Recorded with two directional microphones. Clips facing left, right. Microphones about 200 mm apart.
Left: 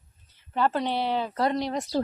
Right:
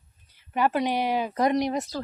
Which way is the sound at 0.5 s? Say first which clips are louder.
Right 1 dB; 10° right (ahead or behind).